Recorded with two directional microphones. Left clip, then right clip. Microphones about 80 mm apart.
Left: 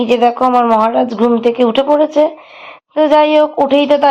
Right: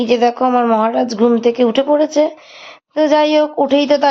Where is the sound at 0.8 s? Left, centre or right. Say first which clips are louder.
Left 2 dB; centre.